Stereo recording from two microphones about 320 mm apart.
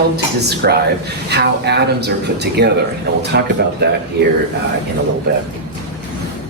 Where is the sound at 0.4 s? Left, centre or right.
Right.